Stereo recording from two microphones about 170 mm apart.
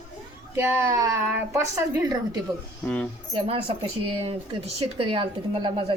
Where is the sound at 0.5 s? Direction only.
15° right (ahead or behind).